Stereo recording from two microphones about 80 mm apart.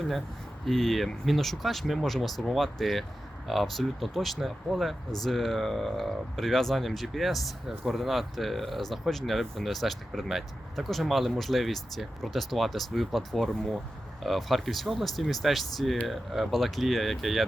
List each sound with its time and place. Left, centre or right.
0.6 s speech: centre